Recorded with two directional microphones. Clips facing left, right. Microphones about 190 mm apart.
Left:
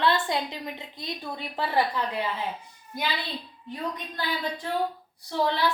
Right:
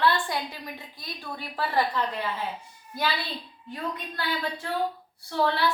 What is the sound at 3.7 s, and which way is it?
A woman's voice, 15° left (ahead or behind).